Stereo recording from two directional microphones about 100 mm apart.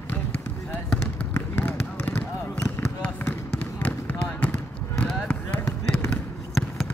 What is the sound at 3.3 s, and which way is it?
Trickle, 15° left (ahead or behind).